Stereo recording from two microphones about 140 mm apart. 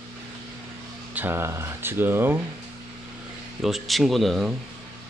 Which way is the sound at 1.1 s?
15° right (ahead or behind).